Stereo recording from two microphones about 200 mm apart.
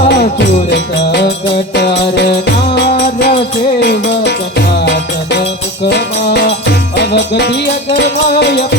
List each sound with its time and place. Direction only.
0.1 s music: 55° left (ahead or behind)